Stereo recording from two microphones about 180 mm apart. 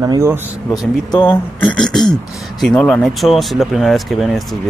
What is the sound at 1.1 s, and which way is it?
Speech, 25° left (ahead or behind).